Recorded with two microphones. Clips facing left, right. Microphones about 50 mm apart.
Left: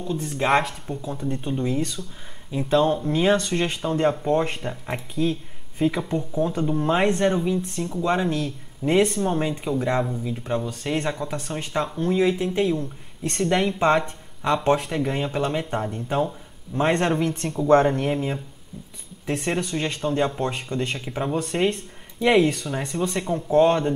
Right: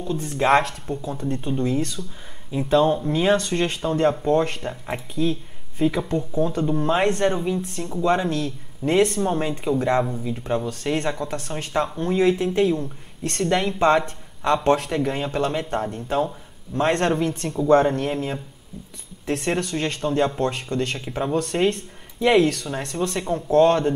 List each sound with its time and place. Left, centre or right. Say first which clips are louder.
0.0 s speech: right 2 dB; centre
4.3 s speech: right 2 dB; centre
4.6 s speech: right 1 dB; centre
5.1 s speech: right 1 dB; centre
5.8 s speech: right 1 dB; centre
18.1 s speech: left 1 dB; centre
20.3 s speech: right 2 dB; centre